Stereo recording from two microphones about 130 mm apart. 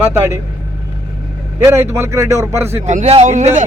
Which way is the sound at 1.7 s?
20° right (ahead or behind).